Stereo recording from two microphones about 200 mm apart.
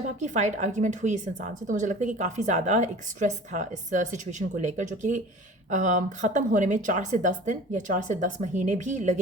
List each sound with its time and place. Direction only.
0.2 s a woman's voice: 35° right (ahead or behind)